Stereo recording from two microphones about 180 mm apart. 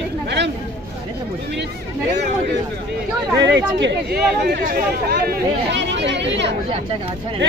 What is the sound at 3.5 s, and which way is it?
Speech, 80° right.